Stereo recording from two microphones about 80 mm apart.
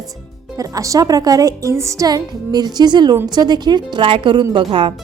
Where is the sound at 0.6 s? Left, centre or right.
Right.